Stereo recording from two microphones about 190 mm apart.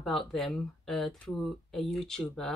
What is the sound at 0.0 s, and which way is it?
Speech, centre (ahead or behind).